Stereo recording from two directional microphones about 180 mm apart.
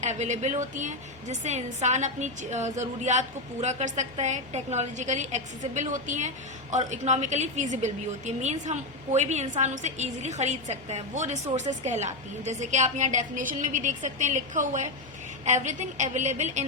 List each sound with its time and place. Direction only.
0.0 s a woman's voice: 40° right (ahead or behind)